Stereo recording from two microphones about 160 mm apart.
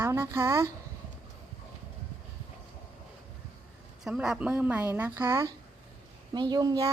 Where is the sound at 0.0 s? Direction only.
15° right (ahead or behind).